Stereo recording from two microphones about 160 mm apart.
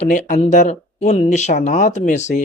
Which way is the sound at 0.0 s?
45° left (ahead or behind).